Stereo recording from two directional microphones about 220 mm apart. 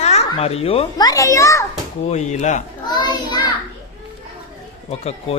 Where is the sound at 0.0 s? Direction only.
30° left (ahead or behind); by 1.6 s 15° left (ahead or behind).